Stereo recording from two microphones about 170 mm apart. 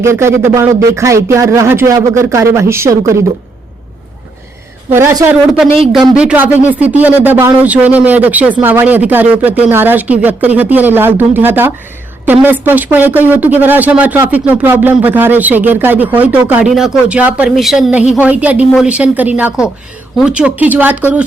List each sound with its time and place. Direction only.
0.0 s speech: 15° right (ahead or behind)
4.9 s speech: 15° right (ahead or behind)